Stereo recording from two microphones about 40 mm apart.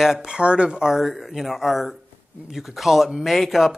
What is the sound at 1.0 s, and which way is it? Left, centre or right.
Speech, centre.